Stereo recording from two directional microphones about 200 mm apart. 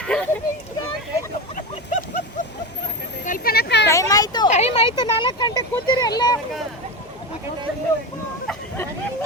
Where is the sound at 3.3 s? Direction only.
50° left (ahead or behind).